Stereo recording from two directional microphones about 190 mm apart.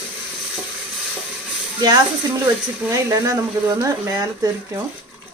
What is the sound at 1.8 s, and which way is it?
Speech, 20° right (ahead or behind).